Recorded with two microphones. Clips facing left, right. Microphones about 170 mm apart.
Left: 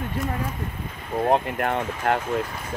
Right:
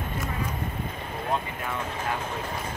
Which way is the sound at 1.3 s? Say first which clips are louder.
Left 8 dB; 65° left (ahead or behind).